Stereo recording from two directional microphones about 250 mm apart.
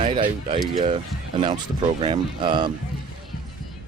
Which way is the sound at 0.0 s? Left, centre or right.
Right.